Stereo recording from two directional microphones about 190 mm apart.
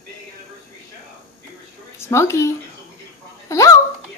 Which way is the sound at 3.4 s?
15° left (ahead or behind).